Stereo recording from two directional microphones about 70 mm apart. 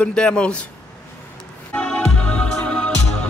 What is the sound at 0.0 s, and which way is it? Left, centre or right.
Speech, centre.